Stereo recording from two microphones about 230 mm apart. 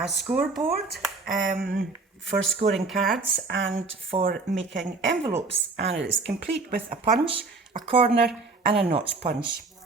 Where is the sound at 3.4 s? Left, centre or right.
Right.